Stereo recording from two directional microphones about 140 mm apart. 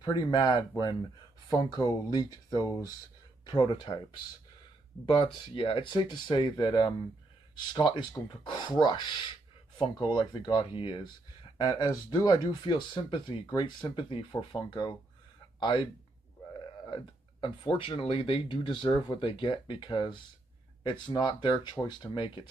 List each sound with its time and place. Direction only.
0.0 s speech: 30° left (ahead or behind)
5.0 s speech: 40° left (ahead or behind)